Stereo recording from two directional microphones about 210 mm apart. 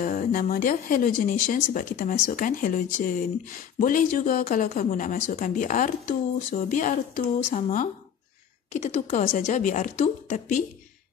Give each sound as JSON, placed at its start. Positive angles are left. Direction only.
{"t": 0.0, "sound": "a woman's voice", "side_deg": 40}